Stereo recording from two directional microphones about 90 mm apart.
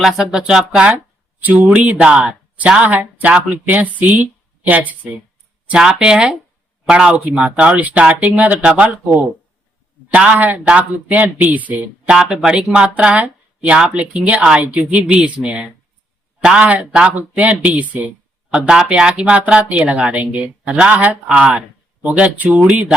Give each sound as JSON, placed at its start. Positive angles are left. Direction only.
{"t": 0.0, "sound": "speech", "side_deg": 0}
{"t": 12.1, "sound": "speech", "side_deg": -5}